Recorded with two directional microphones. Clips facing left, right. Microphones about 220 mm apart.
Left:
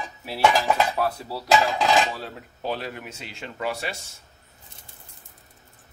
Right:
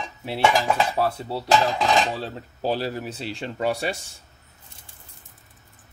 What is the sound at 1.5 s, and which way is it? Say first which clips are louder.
Cutlery: even; 5° left (ahead or behind).